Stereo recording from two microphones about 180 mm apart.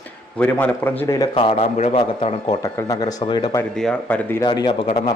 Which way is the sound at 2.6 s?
20° left (ahead or behind).